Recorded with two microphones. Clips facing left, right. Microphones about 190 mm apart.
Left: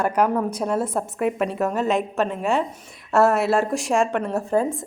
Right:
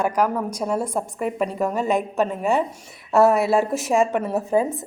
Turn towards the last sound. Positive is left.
turn(degrees=-10)  # may be behind; listen again after turning